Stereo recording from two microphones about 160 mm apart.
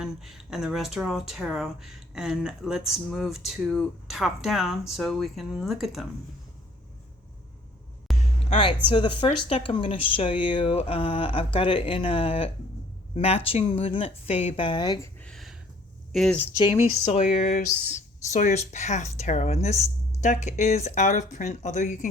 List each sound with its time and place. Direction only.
0.0 s speech: centre (ahead or behind)
8.1 s a sound: centre (ahead or behind)
8.4 s speech: 35° left (ahead or behind)
15.2 s a sound: centre (ahead or behind)
16.1 s speech: centre (ahead or behind)
17.1 s speech: 40° left (ahead or behind)